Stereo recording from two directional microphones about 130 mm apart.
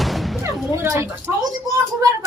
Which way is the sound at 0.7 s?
20° right (ahead or behind).